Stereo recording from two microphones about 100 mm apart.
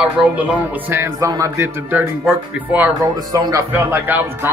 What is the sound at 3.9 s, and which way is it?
Speech, 20° right (ahead or behind).